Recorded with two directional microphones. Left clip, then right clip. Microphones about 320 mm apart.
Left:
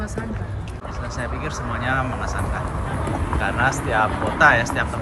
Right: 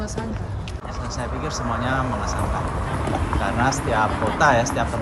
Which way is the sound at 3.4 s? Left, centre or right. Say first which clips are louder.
Left 2 dB; centre.